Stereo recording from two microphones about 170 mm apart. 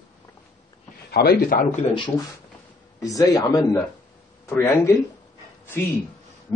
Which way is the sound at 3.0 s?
20° left (ahead or behind).